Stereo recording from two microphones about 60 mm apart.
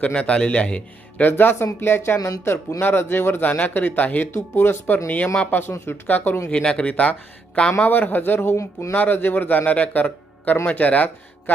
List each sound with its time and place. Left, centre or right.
0.1 s a man's voice: centre
1.2 s a man's voice: left
2.1 s speech: left
2.8 s a man's voice: left
3.5 s a man's voice: left
5.0 s a man's voice: left
6.5 s a man's voice: centre
7.9 s a man's voice: left